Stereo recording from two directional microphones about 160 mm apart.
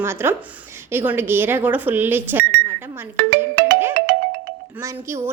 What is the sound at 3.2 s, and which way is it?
Music, 80° right.